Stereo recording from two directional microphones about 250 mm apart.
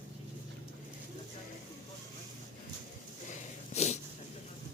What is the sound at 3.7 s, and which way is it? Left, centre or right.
Wheeze, left.